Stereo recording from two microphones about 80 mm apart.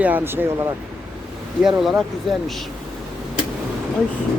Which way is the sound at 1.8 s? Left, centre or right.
Centre.